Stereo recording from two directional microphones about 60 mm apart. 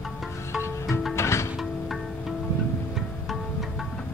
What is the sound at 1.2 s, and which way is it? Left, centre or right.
Music, left.